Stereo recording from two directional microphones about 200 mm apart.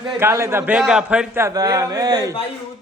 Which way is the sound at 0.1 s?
15° right (ahead or behind).